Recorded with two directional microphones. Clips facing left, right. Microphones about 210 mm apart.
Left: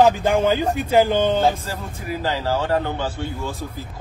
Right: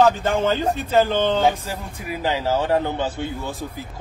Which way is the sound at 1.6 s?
15° right (ahead or behind).